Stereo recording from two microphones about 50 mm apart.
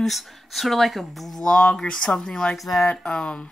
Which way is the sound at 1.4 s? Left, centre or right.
Centre.